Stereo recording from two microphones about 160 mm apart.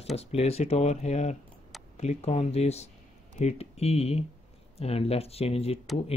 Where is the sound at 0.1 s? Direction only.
40° left (ahead or behind).